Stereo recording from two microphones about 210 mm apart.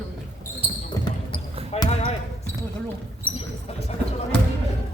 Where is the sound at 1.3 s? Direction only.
30° left (ahead or behind).